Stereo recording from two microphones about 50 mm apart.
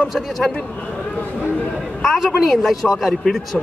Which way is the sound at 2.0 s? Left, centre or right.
Centre.